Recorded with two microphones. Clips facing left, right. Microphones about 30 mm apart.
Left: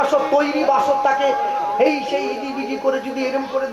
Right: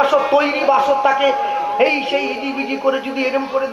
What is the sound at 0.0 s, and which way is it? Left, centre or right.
A man's voice, right.